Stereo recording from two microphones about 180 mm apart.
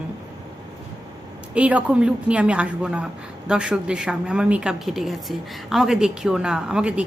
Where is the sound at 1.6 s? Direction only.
5° right (ahead or behind).